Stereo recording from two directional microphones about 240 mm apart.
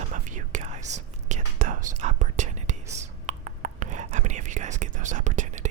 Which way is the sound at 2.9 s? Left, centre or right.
Right.